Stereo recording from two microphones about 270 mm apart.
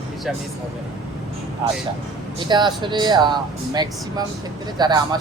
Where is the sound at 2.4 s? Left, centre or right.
Centre.